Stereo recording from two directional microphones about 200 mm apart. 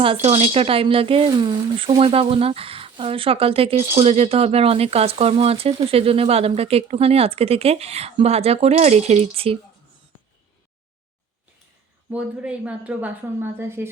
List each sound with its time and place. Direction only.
0.0 s speech: 30° right (ahead or behind)
12.1 s a woman's voice: 5° right (ahead or behind)